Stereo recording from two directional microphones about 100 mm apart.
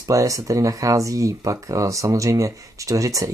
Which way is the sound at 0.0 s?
35° right (ahead or behind).